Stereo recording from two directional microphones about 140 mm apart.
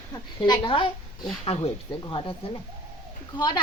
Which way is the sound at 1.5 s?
50° left (ahead or behind).